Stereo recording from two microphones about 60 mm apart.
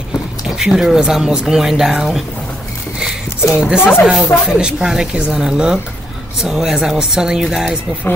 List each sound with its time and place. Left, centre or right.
0.4 s speech: centre
3.5 s speech: centre